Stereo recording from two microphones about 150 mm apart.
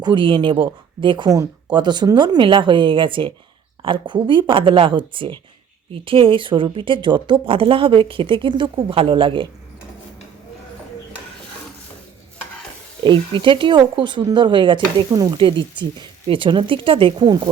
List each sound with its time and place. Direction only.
0.0 s speech: 30° right (ahead or behind)
13.1 s speech: 35° right (ahead or behind)